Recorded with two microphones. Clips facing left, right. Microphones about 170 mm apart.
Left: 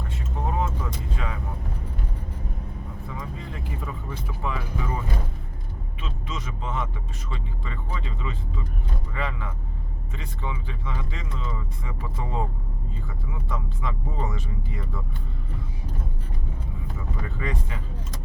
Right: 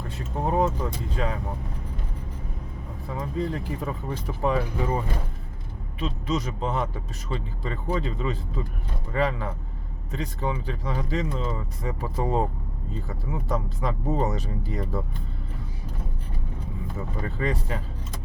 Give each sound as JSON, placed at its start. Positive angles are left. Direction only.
{"t": 1.1, "sound": "speech", "side_deg": -35}
{"t": 3.2, "sound": "speech", "side_deg": -35}
{"t": 6.0, "sound": "speech", "side_deg": -40}
{"t": 17.2, "sound": "speech", "side_deg": -35}